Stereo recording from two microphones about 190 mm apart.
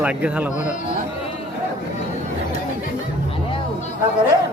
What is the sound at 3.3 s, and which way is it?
Music, 30° left (ahead or behind).